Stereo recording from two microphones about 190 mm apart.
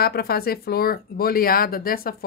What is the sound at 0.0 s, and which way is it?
Speech, 55° left (ahead or behind).